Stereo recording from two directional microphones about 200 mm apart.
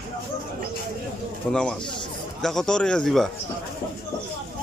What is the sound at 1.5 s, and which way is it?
Speech, 5° left (ahead or behind).